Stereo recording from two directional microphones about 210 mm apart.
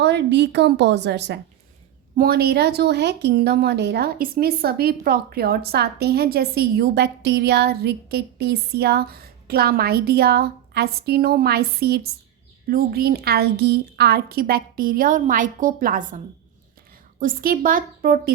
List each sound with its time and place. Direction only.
0.0 s a woman's voice: 55° right (ahead or behind)